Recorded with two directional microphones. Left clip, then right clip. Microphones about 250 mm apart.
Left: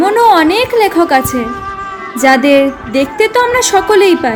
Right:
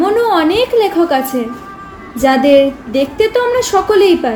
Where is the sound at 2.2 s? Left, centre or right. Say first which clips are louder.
Left 1 dB; left.